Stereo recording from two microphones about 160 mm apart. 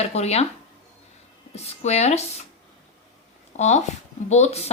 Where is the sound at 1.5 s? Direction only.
40° left (ahead or behind).